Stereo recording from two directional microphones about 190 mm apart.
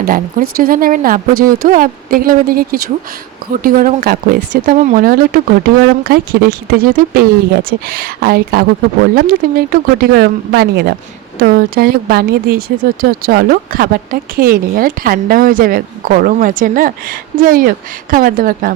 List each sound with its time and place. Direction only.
0.0 s speech: 45° right (ahead or behind)